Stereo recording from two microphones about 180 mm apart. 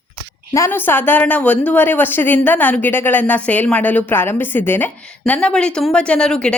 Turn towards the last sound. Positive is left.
turn(degrees=5)  # may be behind; listen again after turning